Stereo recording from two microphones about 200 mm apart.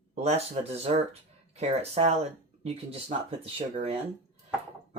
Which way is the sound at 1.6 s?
30° right (ahead or behind).